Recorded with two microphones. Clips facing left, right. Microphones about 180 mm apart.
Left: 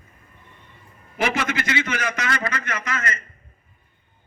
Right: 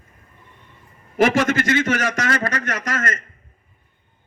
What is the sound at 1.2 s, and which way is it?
A man's voice, 45° right (ahead or behind).